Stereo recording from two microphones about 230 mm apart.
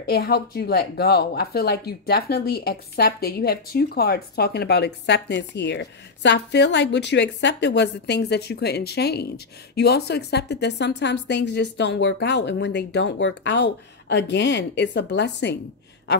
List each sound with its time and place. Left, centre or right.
0.0 s speech: left